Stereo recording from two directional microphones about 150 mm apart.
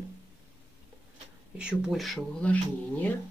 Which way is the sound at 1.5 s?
5° right (ahead or behind).